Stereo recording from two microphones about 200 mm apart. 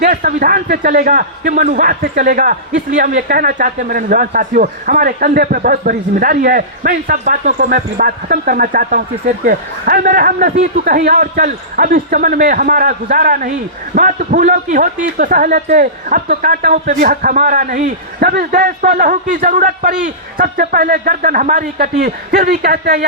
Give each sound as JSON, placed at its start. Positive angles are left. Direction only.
{"t": 0.0, "sound": "speech", "side_deg": -45}